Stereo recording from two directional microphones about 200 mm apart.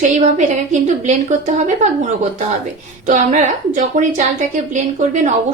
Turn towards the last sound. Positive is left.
turn(degrees=-35)  # may be behind; listen again after turning